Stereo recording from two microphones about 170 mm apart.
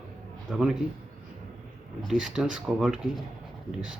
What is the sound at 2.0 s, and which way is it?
Speech, centre (ahead or behind).